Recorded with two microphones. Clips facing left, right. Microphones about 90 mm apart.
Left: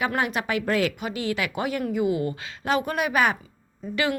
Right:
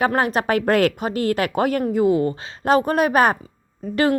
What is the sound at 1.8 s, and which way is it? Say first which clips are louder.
Speech: right 4 dB; 35° right (ahead or behind).